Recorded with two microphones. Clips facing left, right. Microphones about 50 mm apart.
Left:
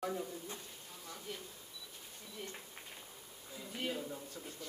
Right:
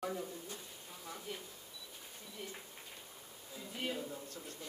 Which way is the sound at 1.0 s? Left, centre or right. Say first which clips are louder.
Right 1 dB; centre.